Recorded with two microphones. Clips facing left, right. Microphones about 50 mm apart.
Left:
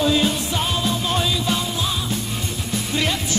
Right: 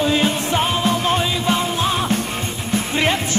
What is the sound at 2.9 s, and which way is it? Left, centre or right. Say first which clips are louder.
Music: right 4 dB; right.